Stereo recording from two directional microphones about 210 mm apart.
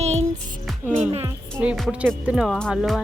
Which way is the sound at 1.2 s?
10° right (ahead or behind).